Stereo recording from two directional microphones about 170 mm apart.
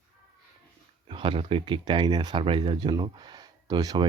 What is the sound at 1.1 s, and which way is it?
Speech, 30° right (ahead or behind).